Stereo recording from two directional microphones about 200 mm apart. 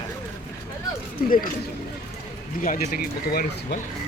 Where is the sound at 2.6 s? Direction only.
45° left (ahead or behind).